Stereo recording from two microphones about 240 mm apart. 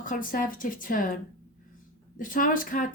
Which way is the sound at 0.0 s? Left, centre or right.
Left.